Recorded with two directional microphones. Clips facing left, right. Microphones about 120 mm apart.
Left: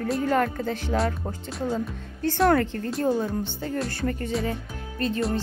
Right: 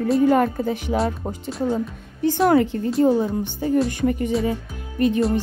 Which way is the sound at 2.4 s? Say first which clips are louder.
Right 3 dB; 10° right (ahead or behind).